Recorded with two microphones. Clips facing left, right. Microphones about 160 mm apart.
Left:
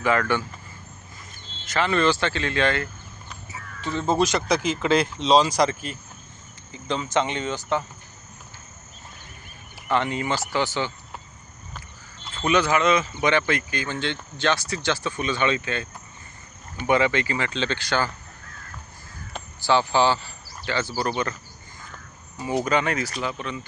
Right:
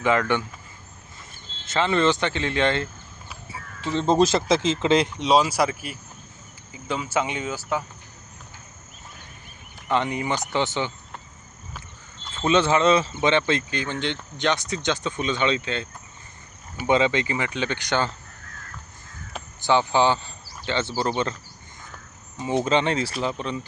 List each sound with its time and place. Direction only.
0.0 s speech: 20° right (ahead or behind)
1.6 s speech: 25° right (ahead or behind); by 7.9 s 5° right (ahead or behind)
9.9 s speech: 15° right (ahead or behind)
12.4 s speech: 25° right (ahead or behind)
13.1 s speech: 20° right (ahead or behind)
19.5 s speech: 20° right (ahead or behind)
22.6 s speech: 25° right (ahead or behind)